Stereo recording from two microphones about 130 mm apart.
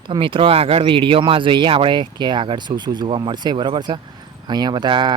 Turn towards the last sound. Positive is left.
turn(degrees=-35)  # may be behind; listen again after turning